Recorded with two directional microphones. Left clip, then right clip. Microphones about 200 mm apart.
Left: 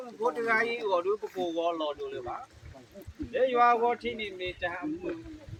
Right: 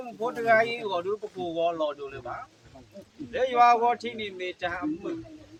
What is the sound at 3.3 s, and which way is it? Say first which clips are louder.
Speech: right 3 dB; 35° right (ahead or behind).